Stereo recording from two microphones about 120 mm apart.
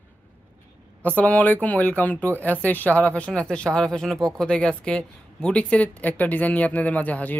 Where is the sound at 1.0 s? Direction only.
10° left (ahead or behind).